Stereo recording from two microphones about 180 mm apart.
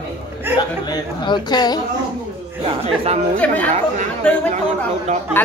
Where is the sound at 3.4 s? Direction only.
10° left (ahead or behind).